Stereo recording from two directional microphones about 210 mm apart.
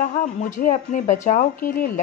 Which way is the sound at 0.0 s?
40° left (ahead or behind).